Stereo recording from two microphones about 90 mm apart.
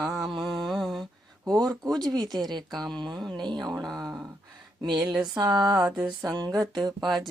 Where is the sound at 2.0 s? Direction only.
50° right (ahead or behind).